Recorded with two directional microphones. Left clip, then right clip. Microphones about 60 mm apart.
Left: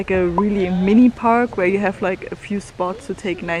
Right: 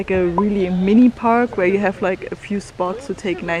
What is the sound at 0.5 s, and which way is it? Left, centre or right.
Speech, left.